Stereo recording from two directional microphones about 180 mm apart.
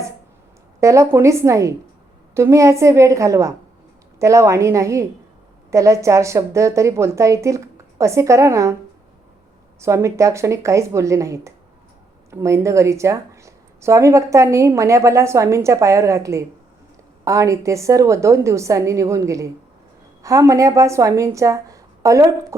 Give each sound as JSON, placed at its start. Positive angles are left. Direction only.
{"t": 0.8, "sound": "a woman's voice", "side_deg": -15}
{"t": 9.8, "sound": "a woman's voice", "side_deg": -15}